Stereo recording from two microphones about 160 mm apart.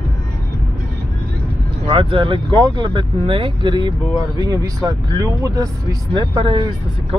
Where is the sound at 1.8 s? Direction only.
35° right (ahead or behind).